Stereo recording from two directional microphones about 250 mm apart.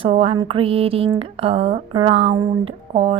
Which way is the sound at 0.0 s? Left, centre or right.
Right.